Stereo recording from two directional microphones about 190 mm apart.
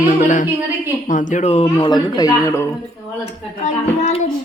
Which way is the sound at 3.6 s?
35° left (ahead or behind).